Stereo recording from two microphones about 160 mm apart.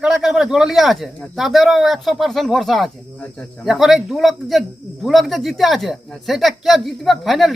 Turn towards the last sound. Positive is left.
turn(degrees=0)  # may be behind; listen again after turning